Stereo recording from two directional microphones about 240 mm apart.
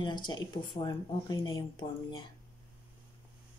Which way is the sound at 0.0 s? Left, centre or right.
Centre.